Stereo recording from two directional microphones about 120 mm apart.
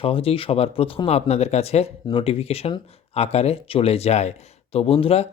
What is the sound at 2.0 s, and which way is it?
Speech, 45° left (ahead or behind).